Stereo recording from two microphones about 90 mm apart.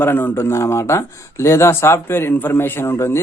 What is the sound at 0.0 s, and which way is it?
Speech, 25° left (ahead or behind).